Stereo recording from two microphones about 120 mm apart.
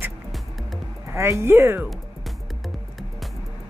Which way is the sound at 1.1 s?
25° right (ahead or behind).